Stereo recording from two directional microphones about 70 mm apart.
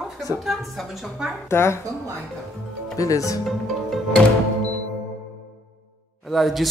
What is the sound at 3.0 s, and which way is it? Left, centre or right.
Speech, left.